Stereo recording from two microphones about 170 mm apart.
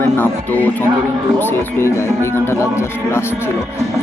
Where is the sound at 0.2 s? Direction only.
10° left (ahead or behind).